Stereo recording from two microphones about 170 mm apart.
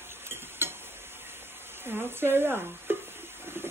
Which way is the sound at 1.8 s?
15° right (ahead or behind).